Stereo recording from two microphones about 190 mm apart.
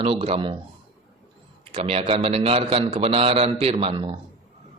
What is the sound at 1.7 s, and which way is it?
A man's voice, 30° right (ahead or behind).